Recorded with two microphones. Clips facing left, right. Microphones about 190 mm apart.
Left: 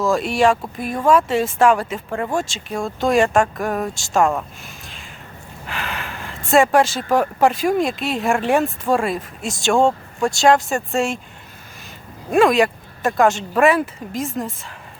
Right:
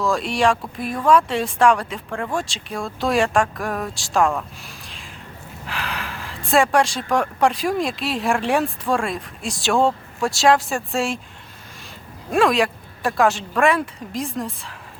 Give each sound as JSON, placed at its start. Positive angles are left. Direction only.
{"t": 0.0, "sound": "speech", "side_deg": 0}
{"t": 4.6, "sound": "a sound", "side_deg": 0}
{"t": 5.6, "sound": "speech", "side_deg": 0}
{"t": 12.3, "sound": "speech", "side_deg": 0}